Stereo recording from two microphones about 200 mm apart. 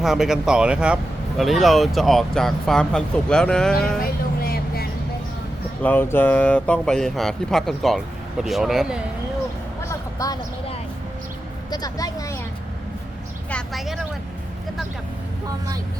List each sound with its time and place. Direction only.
0.0 s speech: centre (ahead or behind)
4.4 s vehicle: 50° left (ahead or behind)
5.8 s speech: 10° left (ahead or behind)
10.2 s speech: 15° left (ahead or behind)
11.7 s speech: 20° left (ahead or behind)
13.5 s speech: centre (ahead or behind)